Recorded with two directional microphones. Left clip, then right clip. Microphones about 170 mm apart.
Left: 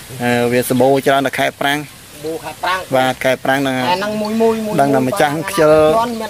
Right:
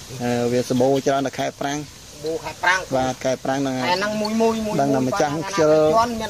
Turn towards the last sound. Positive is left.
turn(degrees=0)  # may be behind; listen again after turning